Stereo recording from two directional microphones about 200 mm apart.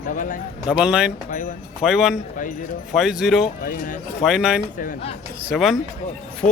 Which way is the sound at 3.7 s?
40° left (ahead or behind).